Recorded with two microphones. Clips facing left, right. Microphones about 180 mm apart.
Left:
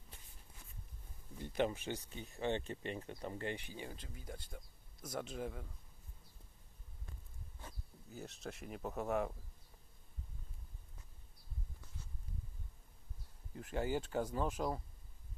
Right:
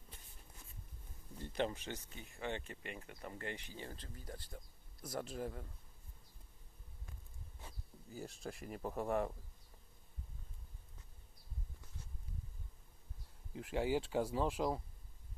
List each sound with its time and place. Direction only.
1.4 s speech: 10° left (ahead or behind)
2.3 s speech: 25° left (ahead or behind); by 5.7 s centre (ahead or behind)
8.1 s speech: centre (ahead or behind)
13.5 s speech: centre (ahead or behind)